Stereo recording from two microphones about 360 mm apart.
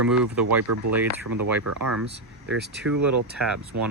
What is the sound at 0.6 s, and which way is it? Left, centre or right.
Speech, right.